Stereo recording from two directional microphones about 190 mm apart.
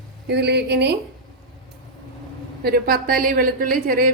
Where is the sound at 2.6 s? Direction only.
55° right (ahead or behind).